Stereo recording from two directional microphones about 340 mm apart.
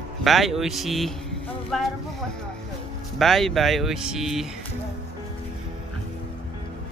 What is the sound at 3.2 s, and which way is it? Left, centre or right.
Speech, centre.